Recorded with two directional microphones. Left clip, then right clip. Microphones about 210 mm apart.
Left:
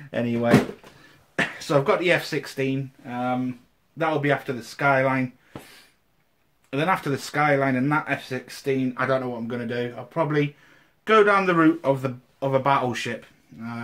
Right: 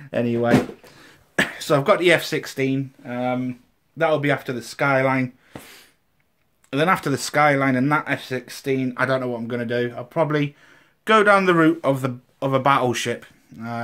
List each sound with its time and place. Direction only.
0.1 s speech: 30° right (ahead or behind)
1.0 s speech: 50° right (ahead or behind)
6.7 s speech: 45° right (ahead or behind)